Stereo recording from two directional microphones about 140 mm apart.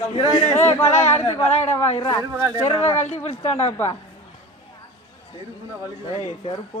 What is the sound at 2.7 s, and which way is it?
Speech, 20° left (ahead or behind).